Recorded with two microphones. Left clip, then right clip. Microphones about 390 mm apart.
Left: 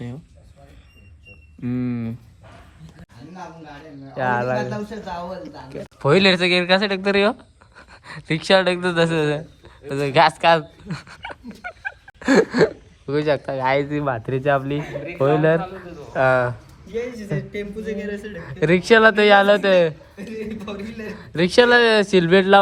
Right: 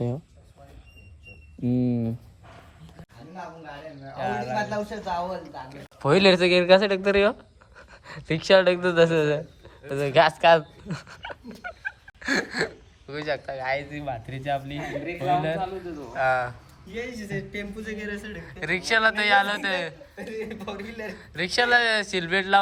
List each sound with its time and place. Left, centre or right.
1.6 s a sound: centre
4.0 s speech: centre
13.9 s speech: centre
14.3 s a man's voice: centre